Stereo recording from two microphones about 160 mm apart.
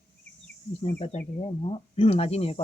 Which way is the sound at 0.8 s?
40° left (ahead or behind).